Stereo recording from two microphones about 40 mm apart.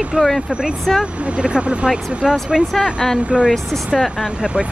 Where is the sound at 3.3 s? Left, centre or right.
Right.